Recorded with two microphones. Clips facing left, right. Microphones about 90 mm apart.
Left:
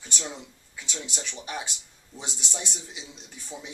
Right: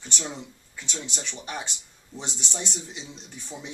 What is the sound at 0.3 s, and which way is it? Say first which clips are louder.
Speech: right 3 dB; 5° left (ahead or behind).